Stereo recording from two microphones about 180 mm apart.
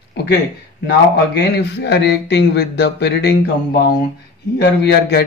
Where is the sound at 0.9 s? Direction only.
70° left (ahead or behind).